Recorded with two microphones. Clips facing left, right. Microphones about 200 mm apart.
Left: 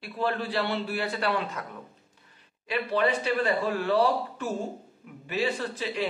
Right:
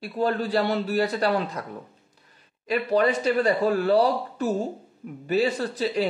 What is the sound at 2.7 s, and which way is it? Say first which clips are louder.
Speech: right 4 dB; 40° right (ahead or behind).